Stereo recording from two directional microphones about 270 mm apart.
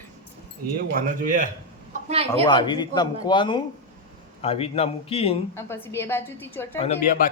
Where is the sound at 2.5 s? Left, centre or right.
Centre.